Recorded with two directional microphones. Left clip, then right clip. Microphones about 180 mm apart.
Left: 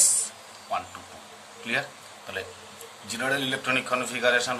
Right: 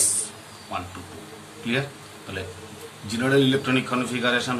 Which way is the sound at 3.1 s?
40° left (ahead or behind).